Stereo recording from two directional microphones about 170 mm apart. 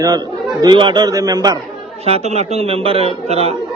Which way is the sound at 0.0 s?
20° right (ahead or behind).